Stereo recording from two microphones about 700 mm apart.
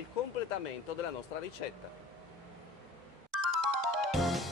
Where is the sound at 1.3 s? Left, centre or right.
Left.